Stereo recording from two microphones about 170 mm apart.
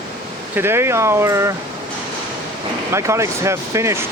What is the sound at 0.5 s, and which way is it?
Speech, 15° right (ahead or behind).